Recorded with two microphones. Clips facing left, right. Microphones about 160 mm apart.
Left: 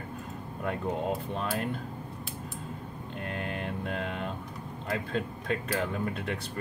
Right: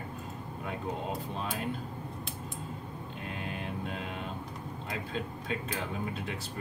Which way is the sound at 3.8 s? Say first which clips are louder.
Left 4 dB; 60° left (ahead or behind).